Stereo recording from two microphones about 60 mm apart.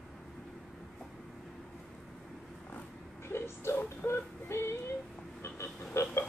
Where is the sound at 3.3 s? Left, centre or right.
Left.